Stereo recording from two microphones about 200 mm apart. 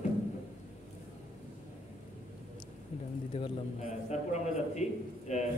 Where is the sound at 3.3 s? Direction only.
35° left (ahead or behind).